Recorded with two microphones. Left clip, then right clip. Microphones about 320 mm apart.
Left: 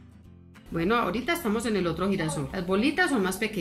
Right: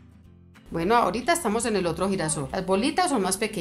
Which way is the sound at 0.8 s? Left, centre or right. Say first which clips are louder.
Right 4 dB; centre.